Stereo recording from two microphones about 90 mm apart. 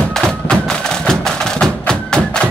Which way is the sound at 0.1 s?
5° left (ahead or behind).